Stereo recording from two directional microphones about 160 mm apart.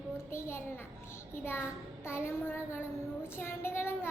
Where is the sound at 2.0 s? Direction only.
15° left (ahead or behind).